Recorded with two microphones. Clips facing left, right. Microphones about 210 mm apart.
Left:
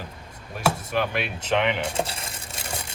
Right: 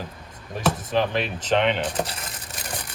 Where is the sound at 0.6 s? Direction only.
10° left (ahead or behind).